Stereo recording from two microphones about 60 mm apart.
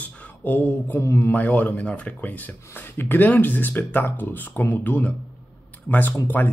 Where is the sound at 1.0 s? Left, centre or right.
Left.